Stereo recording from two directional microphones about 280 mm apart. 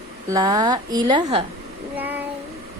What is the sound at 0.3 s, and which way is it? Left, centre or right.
A woman's voice, centre.